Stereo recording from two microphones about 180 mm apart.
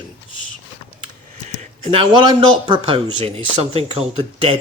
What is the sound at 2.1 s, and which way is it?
A man's voice, 25° right (ahead or behind).